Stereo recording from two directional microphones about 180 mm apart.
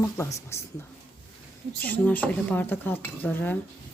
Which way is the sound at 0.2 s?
15° left (ahead or behind).